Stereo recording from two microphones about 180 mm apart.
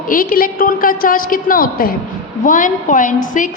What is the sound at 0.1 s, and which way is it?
A woman's voice, 50° left (ahead or behind).